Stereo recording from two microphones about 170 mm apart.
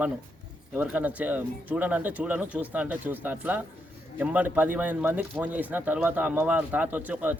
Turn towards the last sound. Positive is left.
turn(degrees=-10)  # may be behind; listen again after turning